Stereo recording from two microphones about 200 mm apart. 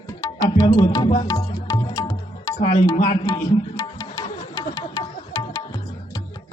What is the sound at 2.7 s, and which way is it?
Speech, 25° left (ahead or behind).